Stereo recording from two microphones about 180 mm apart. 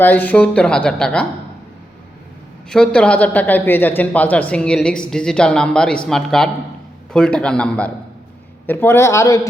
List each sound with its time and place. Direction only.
0.0 s speech: 10° left (ahead or behind)
2.6 s speech: 5° left (ahead or behind)